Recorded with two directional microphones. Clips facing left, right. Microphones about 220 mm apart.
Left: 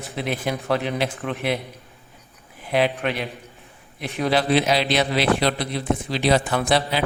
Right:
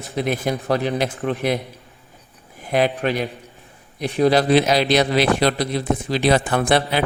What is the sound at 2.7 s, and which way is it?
A man's voice, 45° right (ahead or behind).